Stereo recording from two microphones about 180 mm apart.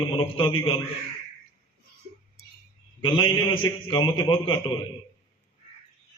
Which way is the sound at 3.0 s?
30° left (ahead or behind).